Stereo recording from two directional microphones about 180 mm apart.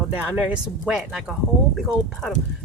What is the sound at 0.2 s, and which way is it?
Speech, 5° right (ahead or behind).